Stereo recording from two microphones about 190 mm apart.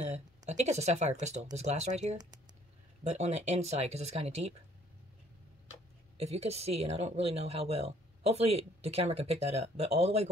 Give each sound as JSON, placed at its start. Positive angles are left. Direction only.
{"t": 0.0, "sound": "speech", "side_deg": -35}
{"t": 6.1, "sound": "speech", "side_deg": -35}